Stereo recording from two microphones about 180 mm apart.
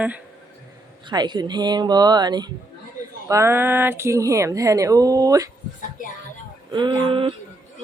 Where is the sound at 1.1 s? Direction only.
25° right (ahead or behind).